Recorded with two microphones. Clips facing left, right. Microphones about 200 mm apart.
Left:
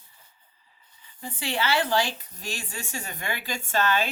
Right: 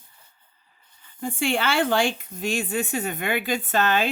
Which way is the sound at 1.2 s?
55° right (ahead or behind).